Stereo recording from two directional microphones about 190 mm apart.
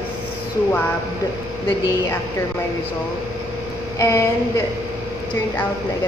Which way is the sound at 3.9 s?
15° left (ahead or behind).